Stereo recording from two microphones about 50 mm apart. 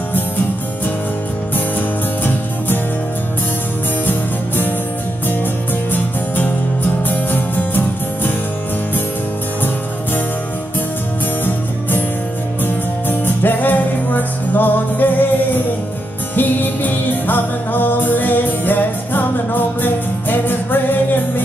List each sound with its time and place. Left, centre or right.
4.0 s music: left
7.1 s music: left
12.6 s music: left